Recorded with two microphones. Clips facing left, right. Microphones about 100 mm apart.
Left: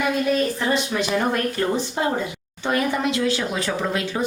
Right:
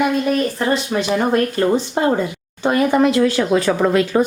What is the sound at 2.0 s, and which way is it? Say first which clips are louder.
Speech: right 6 dB; 45° right (ahead or behind).